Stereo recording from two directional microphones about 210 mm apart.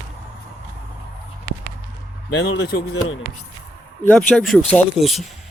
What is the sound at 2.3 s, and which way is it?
Speech, 55° left (ahead or behind).